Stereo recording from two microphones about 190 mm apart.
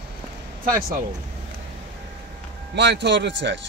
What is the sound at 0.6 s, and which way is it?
Speech, 45° right (ahead or behind).